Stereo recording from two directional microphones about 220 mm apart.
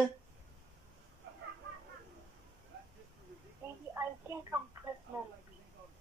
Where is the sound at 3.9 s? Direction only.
10° right (ahead or behind).